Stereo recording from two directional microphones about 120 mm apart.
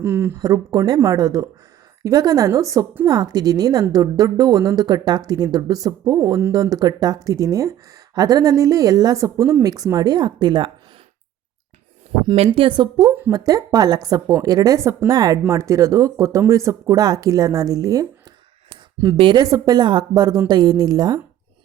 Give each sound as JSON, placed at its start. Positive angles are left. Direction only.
{"t": 0.0, "sound": "speech", "side_deg": -20}
{"t": 0.3, "sound": "a woman's voice", "side_deg": -30}
{"t": 12.5, "sound": "a woman's voice", "side_deg": -40}
{"t": 13.3, "sound": "a woman's voice", "side_deg": -30}
{"t": 19.1, "sound": "a woman's voice", "side_deg": -45}
{"t": 19.4, "sound": "a woman's voice", "side_deg": -30}